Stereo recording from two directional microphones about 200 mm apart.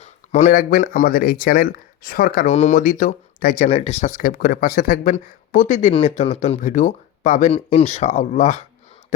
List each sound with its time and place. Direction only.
0.0 s speech: 35° left (ahead or behind)
2.5 s speech: 35° left (ahead or behind)